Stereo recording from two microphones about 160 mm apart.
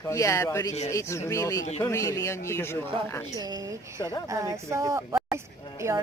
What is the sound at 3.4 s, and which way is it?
A woman's voice, 25° right (ahead or behind).